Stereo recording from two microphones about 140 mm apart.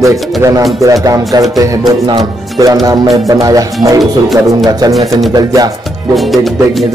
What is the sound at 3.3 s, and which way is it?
Music, 25° right (ahead or behind).